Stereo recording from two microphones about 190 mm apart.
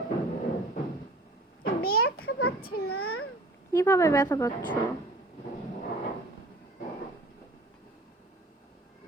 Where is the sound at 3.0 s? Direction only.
90° left.